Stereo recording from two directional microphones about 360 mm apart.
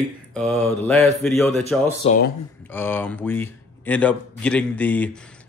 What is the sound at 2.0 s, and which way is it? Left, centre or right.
Speech, left.